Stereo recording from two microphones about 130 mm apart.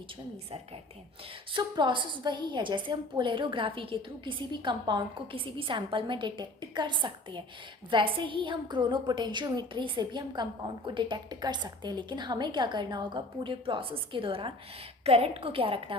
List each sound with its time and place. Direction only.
1.5 s a woman's voice: 35° right (ahead or behind)